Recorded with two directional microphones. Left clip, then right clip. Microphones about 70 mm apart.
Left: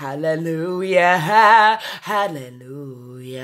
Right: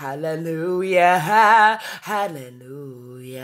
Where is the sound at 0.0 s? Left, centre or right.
Centre.